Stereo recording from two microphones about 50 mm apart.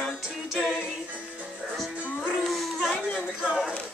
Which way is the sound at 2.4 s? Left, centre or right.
Centre.